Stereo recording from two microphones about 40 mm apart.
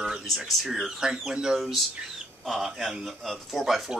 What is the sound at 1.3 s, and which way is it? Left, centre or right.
Speech, centre.